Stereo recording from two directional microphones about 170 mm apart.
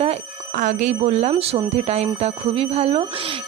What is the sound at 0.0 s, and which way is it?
Speech, 45° right (ahead or behind).